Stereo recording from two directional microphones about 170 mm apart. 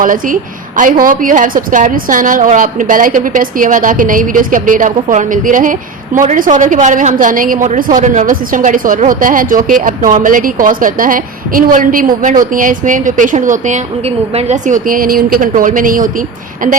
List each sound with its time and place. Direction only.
0.0 s a woman's voice: 55° right (ahead or behind)